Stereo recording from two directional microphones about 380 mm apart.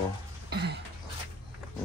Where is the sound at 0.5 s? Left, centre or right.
Right.